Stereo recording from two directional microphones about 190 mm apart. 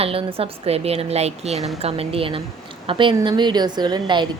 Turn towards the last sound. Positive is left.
turn(degrees=-25)  # may be behind; listen again after turning